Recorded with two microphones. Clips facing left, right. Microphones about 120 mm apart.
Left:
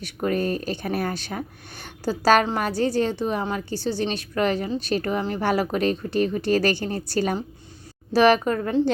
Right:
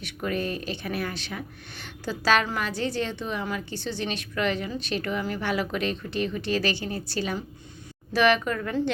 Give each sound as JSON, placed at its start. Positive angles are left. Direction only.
{"t": 0.0, "sound": "speech", "side_deg": 40}
{"t": 8.1, "sound": "speech", "side_deg": 35}